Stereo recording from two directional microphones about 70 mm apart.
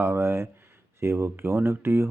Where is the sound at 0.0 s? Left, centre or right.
Right.